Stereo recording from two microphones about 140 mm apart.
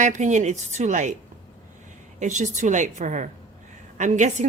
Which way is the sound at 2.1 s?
60° right (ahead or behind).